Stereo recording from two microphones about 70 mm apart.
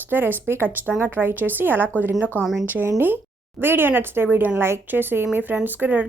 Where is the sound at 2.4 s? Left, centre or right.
Centre.